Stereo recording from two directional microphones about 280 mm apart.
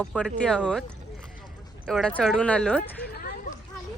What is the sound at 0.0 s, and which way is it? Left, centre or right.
Speech, centre.